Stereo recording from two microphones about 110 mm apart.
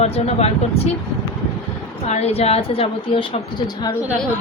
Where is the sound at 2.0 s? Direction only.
80° left; by 3.6 s 55° left (ahead or behind).